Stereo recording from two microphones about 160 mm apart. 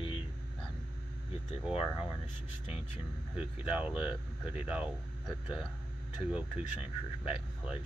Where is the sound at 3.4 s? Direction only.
5° right (ahead or behind).